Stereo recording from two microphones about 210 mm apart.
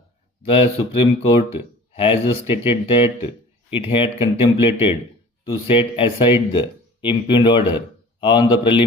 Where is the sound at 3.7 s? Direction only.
25° left (ahead or behind).